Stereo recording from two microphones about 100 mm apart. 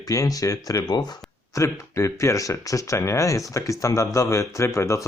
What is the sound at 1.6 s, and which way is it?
Speech, 30° left (ahead or behind).